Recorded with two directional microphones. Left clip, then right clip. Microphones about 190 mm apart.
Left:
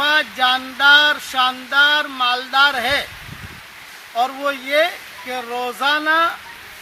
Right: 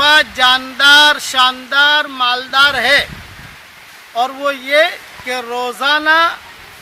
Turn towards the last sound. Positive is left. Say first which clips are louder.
# right 5 dB
turn(degrees=-15)  # may be behind; listen again after turning